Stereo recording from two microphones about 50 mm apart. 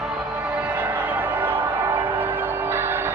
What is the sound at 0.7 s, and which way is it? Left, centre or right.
Music, right.